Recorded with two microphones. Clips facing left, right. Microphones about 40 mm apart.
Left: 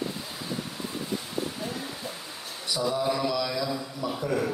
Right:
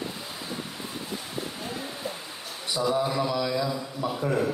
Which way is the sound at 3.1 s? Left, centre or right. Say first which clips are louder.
Right 1 dB; right.